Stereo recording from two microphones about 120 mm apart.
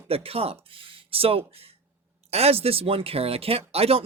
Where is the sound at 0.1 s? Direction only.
55° right (ahead or behind).